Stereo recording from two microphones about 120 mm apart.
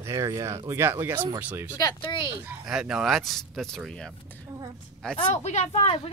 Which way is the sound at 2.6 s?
5° right (ahead or behind).